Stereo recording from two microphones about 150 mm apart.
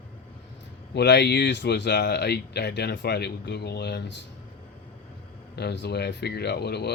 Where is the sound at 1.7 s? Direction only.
90° left.